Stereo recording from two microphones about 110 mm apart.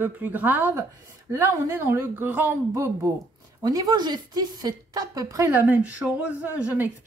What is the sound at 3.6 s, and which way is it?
Speech, 35° right (ahead or behind).